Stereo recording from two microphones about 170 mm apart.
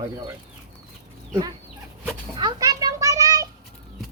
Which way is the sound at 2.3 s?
25° right (ahead or behind).